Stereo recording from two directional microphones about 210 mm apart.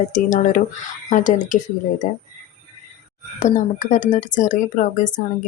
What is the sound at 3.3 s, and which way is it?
A woman's voice, 35° left (ahead or behind).